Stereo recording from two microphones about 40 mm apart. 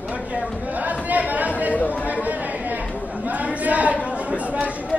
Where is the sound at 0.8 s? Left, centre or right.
Right.